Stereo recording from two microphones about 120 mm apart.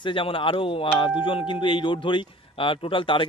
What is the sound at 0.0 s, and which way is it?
Speech, 45° left (ahead or behind).